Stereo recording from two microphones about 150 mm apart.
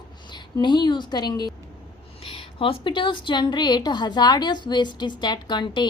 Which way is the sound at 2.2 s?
40° left (ahead or behind).